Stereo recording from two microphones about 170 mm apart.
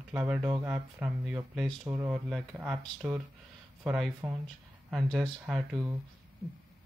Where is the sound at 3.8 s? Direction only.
5° right (ahead or behind).